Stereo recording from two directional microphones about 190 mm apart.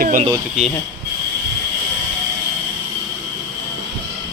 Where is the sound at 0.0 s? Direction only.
45° right (ahead or behind).